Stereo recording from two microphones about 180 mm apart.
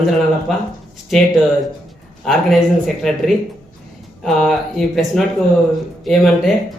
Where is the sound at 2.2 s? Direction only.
Centre (ahead or behind).